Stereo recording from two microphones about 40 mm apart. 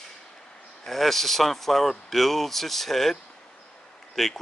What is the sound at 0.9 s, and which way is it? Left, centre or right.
Speech, centre.